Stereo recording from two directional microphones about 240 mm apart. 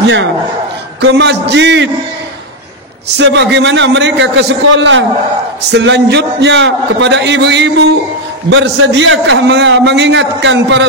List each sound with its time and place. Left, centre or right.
1.0 s a man's voice: right
3.2 s a man's voice: right